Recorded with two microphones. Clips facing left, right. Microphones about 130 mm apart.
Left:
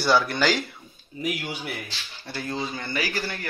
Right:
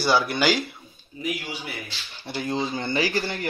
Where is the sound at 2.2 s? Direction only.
20° right (ahead or behind).